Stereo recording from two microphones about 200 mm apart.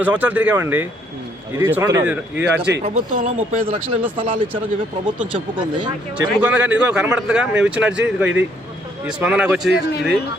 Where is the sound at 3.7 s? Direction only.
25° right (ahead or behind).